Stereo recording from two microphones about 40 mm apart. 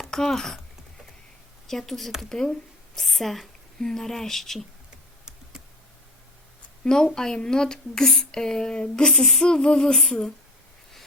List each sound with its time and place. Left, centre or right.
0.1 s typing: centre
1.6 s a woman's voice: centre
6.8 s speech: centre
8.0 s speech: centre
8.3 s speech: centre
9.1 s speech: centre